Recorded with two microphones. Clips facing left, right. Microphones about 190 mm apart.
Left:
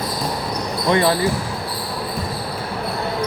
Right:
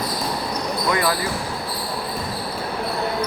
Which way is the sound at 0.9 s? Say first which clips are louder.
Left 5 dB; 25° left (ahead or behind).